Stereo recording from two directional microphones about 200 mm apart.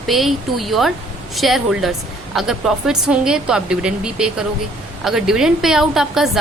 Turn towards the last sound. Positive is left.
turn(degrees=0)  # may be behind; listen again after turning